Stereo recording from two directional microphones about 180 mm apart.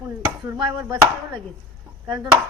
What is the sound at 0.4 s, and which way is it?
Speech, 20° right (ahead or behind).